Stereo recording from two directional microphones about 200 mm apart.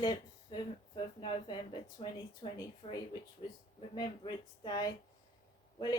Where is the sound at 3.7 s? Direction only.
25° left (ahead or behind).